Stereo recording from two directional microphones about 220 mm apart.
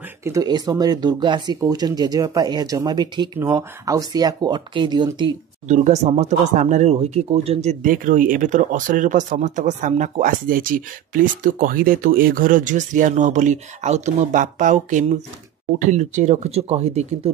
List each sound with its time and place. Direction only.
0.2 s speech: 15° right (ahead or behind)
5.7 s speech: 30° right (ahead or behind)